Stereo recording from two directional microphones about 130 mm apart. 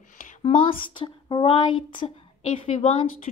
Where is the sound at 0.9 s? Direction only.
40° left (ahead or behind).